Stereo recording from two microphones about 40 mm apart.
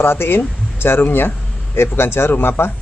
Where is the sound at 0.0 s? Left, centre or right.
Left.